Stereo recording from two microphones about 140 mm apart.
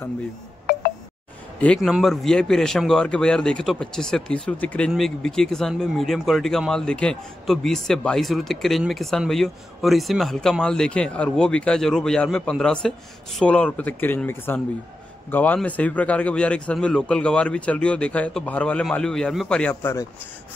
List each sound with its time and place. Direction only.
1.8 s a man's voice: centre (ahead or behind)
19.7 s a man's voice: 20° left (ahead or behind)